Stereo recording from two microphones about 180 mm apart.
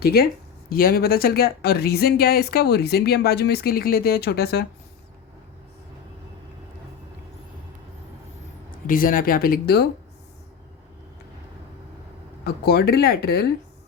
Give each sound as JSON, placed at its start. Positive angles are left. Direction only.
{"t": 0.0, "sound": "speech", "side_deg": 60}
{"t": 8.9, "sound": "speech", "side_deg": 50}
{"t": 12.5, "sound": "speech", "side_deg": 60}